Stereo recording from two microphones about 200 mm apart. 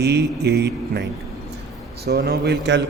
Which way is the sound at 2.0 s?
55° right (ahead or behind).